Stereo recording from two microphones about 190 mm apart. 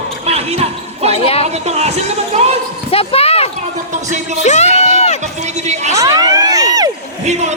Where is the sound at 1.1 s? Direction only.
30° left (ahead or behind).